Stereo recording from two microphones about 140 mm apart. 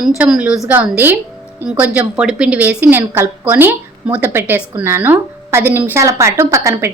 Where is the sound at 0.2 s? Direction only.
10° right (ahead or behind).